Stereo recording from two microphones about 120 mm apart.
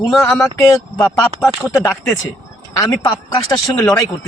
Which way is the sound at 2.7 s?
30° left (ahead or behind).